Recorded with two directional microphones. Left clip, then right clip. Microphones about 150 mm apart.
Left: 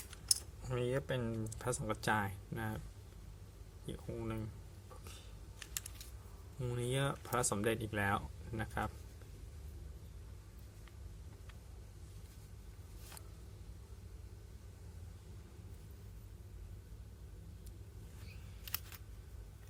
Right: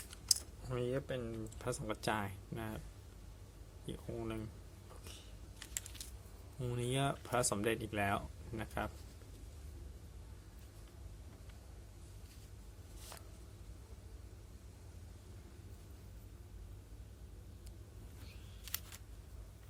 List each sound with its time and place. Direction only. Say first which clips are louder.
0.1 s keys jangling: right 2 dB; centre (ahead or behind)
0.9 s speech: left 2 dB; 15° left (ahead or behind)
1.5 s speech: left 1 dB; centre (ahead or behind)
3.8 s speech: even; centre (ahead or behind)
6.6 s speech: even; 5° right (ahead or behind)